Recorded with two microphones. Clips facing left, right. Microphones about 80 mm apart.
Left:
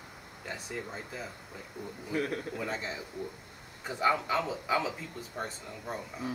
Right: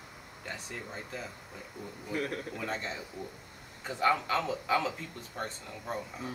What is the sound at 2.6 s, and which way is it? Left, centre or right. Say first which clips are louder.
Speech: even; centre.